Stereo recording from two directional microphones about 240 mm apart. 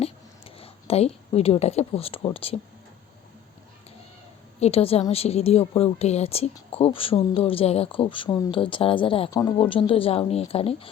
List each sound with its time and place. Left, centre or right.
0.0 s a woman's voice: left
4.6 s a woman's voice: left